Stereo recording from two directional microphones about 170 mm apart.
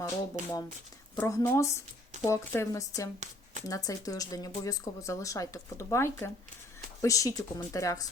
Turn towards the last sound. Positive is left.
turn(degrees=20)  # may be behind; listen again after turning